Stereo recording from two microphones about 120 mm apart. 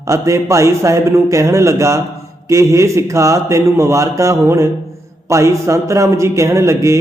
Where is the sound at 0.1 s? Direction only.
25° right (ahead or behind).